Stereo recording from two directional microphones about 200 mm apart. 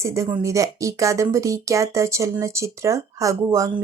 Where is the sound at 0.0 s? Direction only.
15° right (ahead or behind).